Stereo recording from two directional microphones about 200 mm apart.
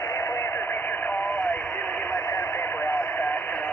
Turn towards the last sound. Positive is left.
turn(degrees=10)  # may be behind; listen again after turning